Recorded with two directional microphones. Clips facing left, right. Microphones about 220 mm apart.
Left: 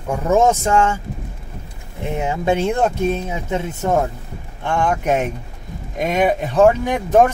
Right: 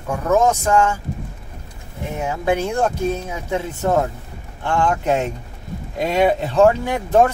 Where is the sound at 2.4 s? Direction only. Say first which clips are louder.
Left 1 dB; 25° left (ahead or behind).